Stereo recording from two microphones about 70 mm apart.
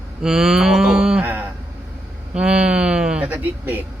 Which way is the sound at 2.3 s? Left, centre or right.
Centre.